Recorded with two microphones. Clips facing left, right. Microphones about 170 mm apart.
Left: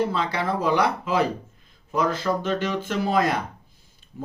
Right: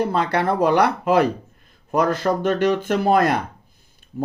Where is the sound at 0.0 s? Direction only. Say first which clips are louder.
Right 4 dB; 55° right (ahead or behind).